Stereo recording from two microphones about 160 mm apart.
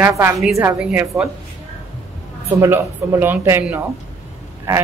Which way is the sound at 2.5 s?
20° right (ahead or behind).